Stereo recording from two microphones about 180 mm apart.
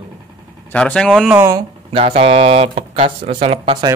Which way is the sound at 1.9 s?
35° right (ahead or behind).